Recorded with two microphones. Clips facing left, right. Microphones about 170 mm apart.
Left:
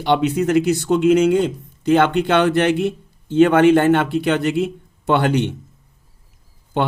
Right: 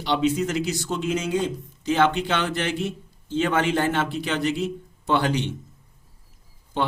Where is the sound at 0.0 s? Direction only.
60° left (ahead or behind).